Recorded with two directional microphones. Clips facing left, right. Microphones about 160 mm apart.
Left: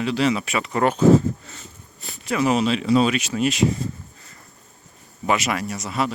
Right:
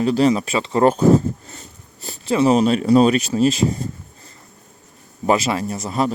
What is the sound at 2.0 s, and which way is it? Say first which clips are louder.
Speech: right 5 dB; 30° right (ahead or behind).